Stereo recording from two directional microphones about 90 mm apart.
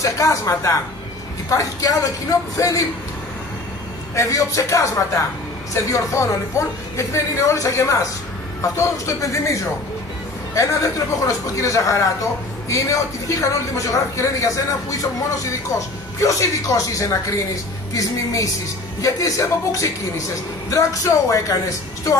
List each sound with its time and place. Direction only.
0.0 s a man's voice: 40° left (ahead or behind)
4.1 s a man's voice: 35° left (ahead or behind)